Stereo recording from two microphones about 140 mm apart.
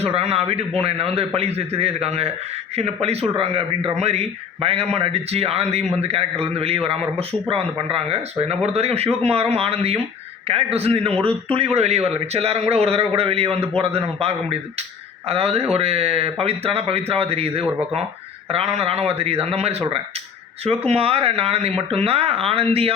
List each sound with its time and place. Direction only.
0.0 s a man's voice: 50° right (ahead or behind)